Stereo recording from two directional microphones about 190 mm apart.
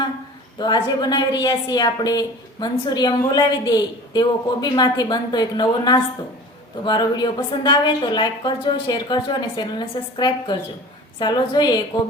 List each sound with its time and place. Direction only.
0.6 s a woman's voice: 20° left (ahead or behind)